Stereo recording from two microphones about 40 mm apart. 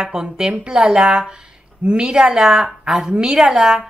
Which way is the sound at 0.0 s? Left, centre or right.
Centre.